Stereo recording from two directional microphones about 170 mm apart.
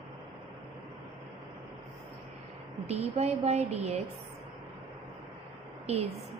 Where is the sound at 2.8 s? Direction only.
40° right (ahead or behind).